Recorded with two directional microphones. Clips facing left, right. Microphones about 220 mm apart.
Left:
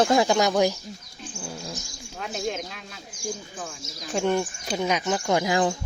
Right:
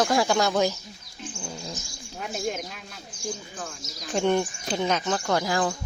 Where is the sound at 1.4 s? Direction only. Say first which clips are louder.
Left 2 dB; centre (ahead or behind).